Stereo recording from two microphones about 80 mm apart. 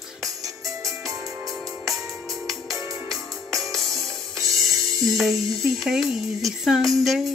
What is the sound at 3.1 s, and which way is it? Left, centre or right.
Music, centre.